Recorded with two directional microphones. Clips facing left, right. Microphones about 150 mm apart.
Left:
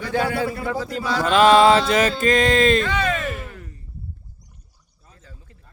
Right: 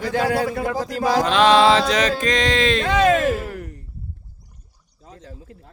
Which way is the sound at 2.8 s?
90° right.